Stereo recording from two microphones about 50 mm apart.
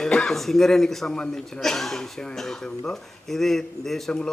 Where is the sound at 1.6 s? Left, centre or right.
Centre.